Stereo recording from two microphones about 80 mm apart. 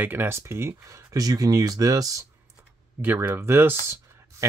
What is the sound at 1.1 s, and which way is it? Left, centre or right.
Speech, right.